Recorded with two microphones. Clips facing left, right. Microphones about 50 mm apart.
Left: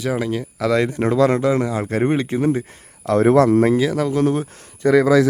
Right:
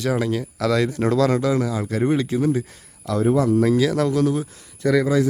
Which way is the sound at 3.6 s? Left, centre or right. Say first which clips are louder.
Left 2 dB; left.